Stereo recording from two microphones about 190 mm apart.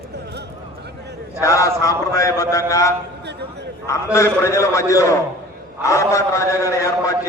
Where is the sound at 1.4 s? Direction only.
15° left (ahead or behind).